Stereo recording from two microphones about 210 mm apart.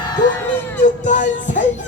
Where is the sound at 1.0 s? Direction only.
35° left (ahead or behind).